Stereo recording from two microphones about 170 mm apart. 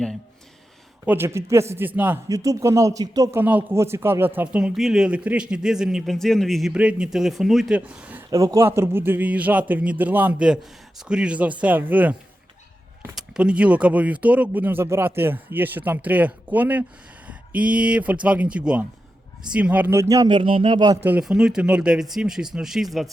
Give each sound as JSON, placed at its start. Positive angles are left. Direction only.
{"t": 1.0, "sound": "speech", "side_deg": -15}
{"t": 8.3, "sound": "speech", "side_deg": -20}
{"t": 13.1, "sound": "speech", "side_deg": -5}
{"t": 21.0, "sound": "speech", "side_deg": -10}